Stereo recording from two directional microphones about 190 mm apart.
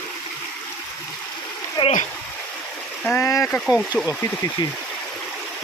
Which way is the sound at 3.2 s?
15° left (ahead or behind).